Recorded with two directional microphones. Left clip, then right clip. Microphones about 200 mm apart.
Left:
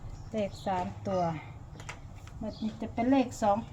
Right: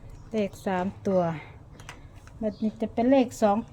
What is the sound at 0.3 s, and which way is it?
Speech, 45° right (ahead or behind).